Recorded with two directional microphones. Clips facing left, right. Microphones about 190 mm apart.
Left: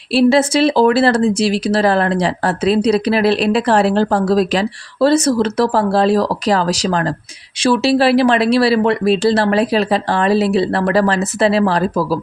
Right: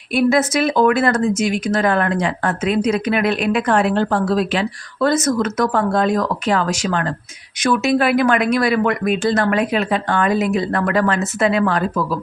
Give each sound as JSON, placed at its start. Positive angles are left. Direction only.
{"t": 0.1, "sound": "speech", "side_deg": 30}